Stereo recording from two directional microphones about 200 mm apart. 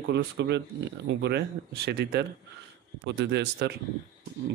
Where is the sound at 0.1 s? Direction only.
60° right (ahead or behind).